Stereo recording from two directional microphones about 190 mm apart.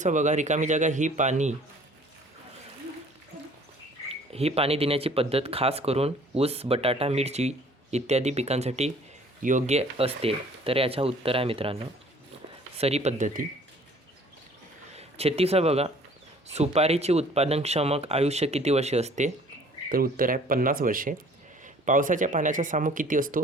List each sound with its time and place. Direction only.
0.0 s speech: 40° right (ahead or behind)
4.1 s speech: 30° right (ahead or behind)
14.9 s speech: 30° right (ahead or behind)
19.9 s speech: 50° right (ahead or behind)